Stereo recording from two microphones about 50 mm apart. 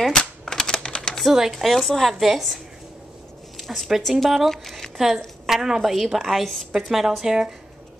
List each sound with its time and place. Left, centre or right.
0.1 s typewriter: centre
0.7 s typing: centre
1.2 s a woman's voice: centre
3.5 s zipper: centre
4.1 s a woman's voice: centre
4.5 s a woman's voice: centre
4.9 s a woman's voice: centre